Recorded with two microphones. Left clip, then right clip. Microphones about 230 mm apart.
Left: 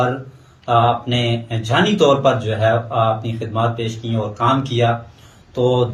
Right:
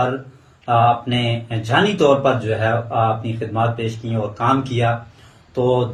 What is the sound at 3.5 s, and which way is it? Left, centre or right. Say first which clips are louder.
Speech: left 1 dB; centre.